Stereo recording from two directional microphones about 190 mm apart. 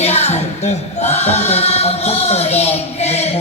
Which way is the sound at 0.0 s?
35° left (ahead or behind).